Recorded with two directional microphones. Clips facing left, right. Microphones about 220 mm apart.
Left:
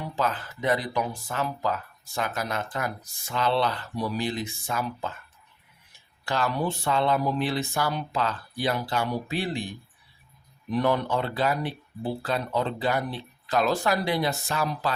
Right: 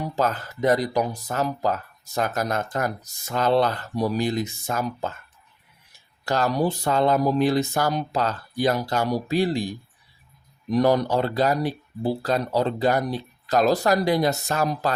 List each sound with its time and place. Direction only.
0.0 s speech: 40° right (ahead or behind)
6.2 s speech: 40° right (ahead or behind)